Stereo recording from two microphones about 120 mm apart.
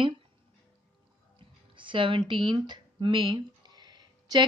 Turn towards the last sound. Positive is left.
turn(degrees=-35)  # may be behind; listen again after turning